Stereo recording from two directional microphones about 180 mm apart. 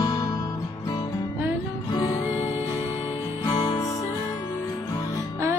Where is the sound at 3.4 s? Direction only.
25° left (ahead or behind).